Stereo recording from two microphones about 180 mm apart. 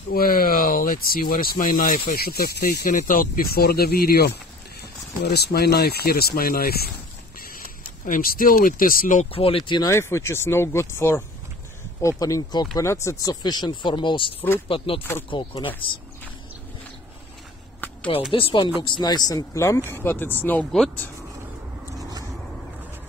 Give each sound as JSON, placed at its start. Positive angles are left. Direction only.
{"t": 0.1, "sound": "speech", "side_deg": 55}
{"t": 9.2, "sound": "speech", "side_deg": 30}
{"t": 9.7, "sound": "speech", "side_deg": 20}
{"t": 18.3, "sound": "speech", "side_deg": 30}